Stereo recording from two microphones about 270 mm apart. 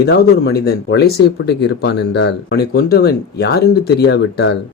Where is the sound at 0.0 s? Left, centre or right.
Left.